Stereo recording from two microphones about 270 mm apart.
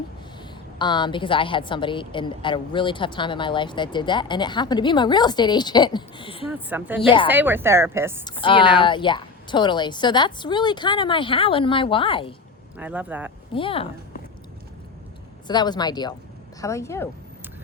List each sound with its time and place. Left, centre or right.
0.8 s a woman's voice: centre
6.5 s a woman's voice: centre
8.2 s a woman's voice: centre
12.7 s speech: centre
13.5 s a woman's voice: centre
15.4 s a woman's voice: centre